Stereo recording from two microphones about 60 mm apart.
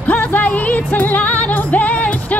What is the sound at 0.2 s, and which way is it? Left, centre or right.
Music, left.